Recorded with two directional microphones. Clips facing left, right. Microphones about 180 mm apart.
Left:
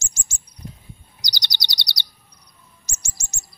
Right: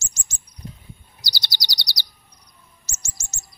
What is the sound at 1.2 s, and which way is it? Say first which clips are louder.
Chirp: even; 20° left (ahead or behind).